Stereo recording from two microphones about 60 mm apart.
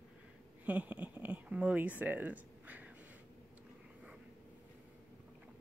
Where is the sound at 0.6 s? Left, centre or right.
Right.